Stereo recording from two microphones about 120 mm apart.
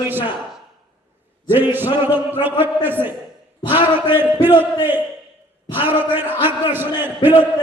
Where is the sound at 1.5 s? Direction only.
15° right (ahead or behind).